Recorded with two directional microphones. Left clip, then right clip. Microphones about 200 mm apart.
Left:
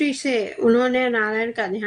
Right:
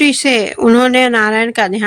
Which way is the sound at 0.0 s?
40° right (ahead or behind).